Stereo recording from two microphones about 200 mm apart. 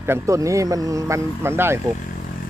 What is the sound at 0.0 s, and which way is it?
Speech, 15° right (ahead or behind).